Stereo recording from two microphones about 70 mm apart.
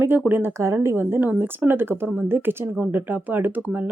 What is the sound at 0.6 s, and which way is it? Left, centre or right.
Speech, right.